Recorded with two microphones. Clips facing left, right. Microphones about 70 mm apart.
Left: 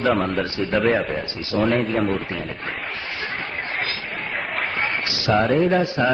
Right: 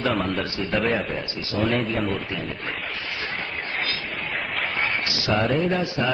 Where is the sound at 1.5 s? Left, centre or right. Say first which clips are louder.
Left 4 dB; left.